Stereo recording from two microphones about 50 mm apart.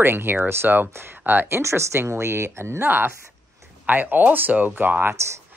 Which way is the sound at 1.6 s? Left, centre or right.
Right.